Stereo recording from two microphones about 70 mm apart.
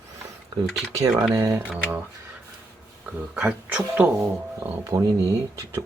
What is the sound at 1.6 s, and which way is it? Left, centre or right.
Speech, right.